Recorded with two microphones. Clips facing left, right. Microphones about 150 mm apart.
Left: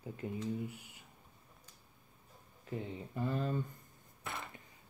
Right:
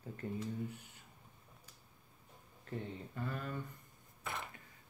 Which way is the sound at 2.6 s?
15° left (ahead or behind).